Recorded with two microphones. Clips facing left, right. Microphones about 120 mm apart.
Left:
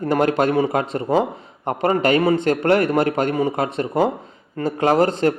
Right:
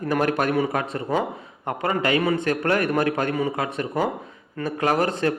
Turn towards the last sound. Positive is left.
turn(degrees=30)  # may be behind; listen again after turning